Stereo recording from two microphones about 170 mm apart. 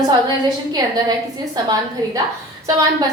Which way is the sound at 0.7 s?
25° right (ahead or behind).